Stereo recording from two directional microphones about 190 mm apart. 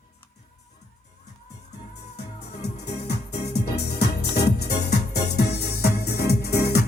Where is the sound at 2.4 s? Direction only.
60° left (ahead or behind).